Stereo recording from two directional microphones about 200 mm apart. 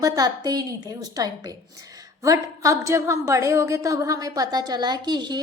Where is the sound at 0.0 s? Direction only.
20° right (ahead or behind).